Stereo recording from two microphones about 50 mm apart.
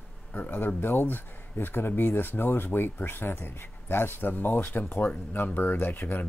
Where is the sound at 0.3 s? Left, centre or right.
Left.